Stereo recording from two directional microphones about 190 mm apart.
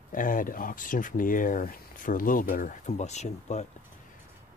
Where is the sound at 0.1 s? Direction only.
45° left (ahead or behind).